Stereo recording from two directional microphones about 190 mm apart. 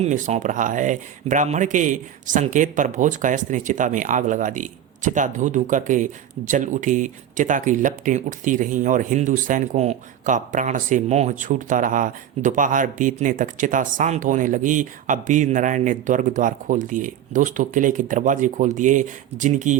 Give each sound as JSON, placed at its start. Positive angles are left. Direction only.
{"t": 0.0, "sound": "speech", "side_deg": -40}